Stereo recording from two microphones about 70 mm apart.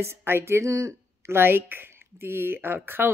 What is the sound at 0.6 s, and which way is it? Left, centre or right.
Speech, right.